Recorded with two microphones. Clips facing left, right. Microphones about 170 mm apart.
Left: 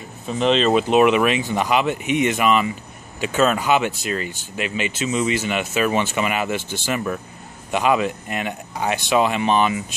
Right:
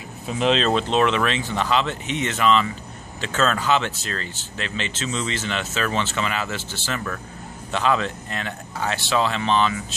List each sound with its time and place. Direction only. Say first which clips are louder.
0.3 s speech: left 3 dB; centre (ahead or behind); by 9.9 s 15° left (ahead or behind)